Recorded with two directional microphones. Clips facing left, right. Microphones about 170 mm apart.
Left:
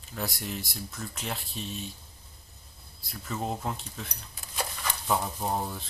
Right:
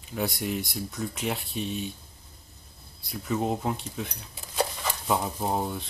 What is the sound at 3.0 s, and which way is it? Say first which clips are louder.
Speech: right 6 dB; centre (ahead or behind).